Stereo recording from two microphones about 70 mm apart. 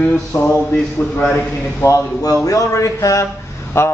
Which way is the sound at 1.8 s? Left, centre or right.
Left.